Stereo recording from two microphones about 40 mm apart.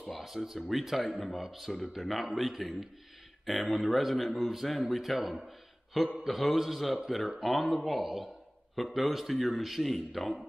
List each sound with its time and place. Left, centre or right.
0.0 s a man's voice: centre